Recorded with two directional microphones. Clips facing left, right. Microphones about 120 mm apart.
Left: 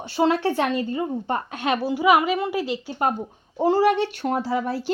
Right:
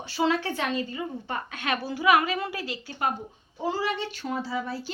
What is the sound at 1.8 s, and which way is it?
Speech, 15° left (ahead or behind).